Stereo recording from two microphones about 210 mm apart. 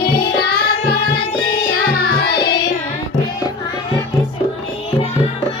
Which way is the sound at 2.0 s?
50° left (ahead or behind).